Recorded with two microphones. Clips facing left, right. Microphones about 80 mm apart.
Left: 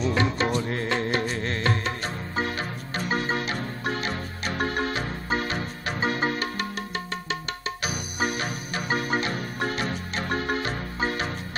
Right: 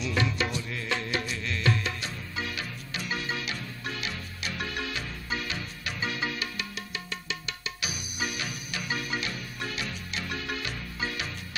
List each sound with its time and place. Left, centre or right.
0.0 s music: left
7.8 s music: left